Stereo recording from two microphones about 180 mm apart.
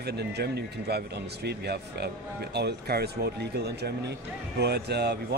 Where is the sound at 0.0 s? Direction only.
65° right (ahead or behind).